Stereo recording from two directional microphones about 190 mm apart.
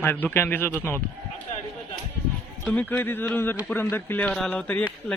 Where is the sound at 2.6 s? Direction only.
10° left (ahead or behind).